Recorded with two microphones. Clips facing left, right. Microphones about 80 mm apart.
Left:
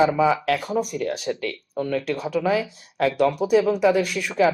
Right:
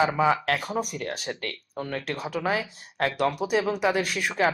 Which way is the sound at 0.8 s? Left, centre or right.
Right.